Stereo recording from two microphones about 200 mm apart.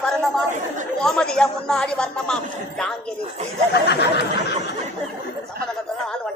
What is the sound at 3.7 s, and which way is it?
Speech, 55° left (ahead or behind).